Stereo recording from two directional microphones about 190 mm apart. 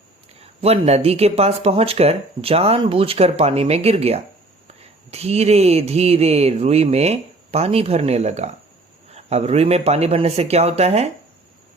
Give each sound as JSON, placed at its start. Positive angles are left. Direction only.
{"t": 0.6, "sound": "speech", "side_deg": -35}